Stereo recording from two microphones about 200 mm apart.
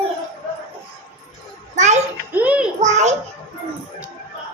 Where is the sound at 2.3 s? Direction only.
5° right (ahead or behind).